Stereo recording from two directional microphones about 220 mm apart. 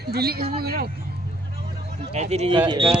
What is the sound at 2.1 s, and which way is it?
Speech, 30° right (ahead or behind).